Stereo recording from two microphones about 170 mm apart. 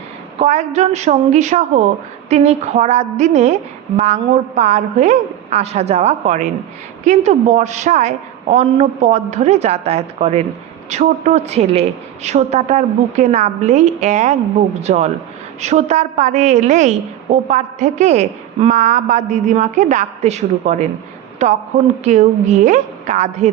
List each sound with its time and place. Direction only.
0.3 s a woman's voice: 40° right (ahead or behind)
22.0 s a woman's voice: 45° right (ahead or behind)